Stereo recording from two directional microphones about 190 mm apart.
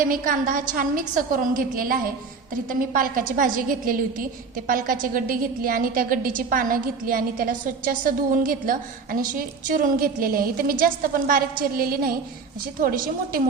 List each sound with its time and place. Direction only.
0.0 s a woman's voice: 45° right (ahead or behind)